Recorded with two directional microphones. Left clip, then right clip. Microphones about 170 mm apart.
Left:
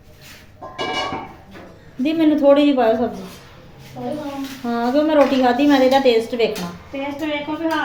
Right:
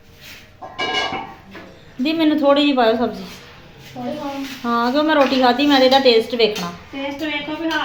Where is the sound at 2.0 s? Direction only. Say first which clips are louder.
Left 1 dB; 5° left (ahead or behind).